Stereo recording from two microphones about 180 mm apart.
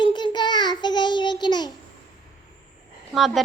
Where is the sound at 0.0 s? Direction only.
25° left (ahead or behind).